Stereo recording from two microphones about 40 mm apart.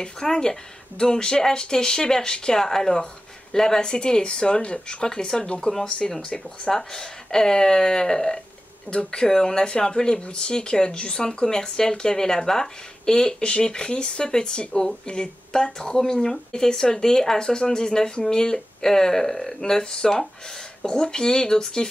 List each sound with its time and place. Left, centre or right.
0.0 s speech: centre